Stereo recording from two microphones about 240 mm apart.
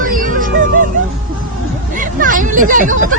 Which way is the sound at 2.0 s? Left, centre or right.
Right.